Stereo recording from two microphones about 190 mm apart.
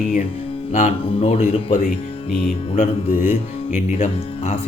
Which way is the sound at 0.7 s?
35° left (ahead or behind).